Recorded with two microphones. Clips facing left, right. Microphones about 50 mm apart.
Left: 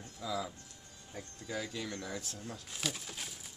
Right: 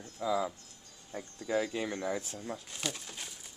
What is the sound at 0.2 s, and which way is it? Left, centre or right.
Speech, right.